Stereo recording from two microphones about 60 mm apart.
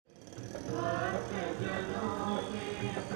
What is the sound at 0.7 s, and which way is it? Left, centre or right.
Music, centre.